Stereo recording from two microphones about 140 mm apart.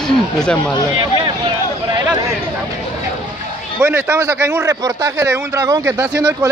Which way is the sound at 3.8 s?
15° right (ahead or behind).